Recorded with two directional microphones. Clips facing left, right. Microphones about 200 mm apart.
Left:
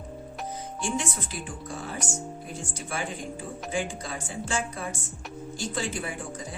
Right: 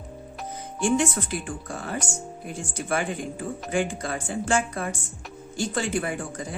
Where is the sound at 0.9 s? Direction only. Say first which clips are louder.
Right 7 dB; 55° right (ahead or behind).